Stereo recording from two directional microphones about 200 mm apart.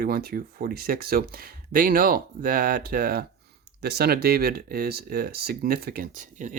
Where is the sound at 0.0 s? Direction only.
50° right (ahead or behind).